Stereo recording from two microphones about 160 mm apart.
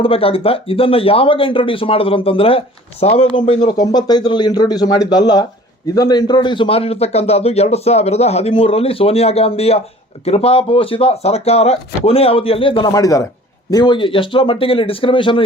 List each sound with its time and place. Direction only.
0.0 s speech: 35° left (ahead or behind)
12.9 s speech: 20° left (ahead or behind)